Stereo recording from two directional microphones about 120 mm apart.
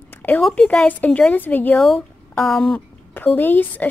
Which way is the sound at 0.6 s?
15° left (ahead or behind).